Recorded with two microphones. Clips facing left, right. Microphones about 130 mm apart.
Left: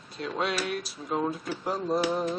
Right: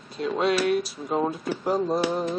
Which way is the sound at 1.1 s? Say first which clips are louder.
Right 3 dB; 20° right (ahead or behind).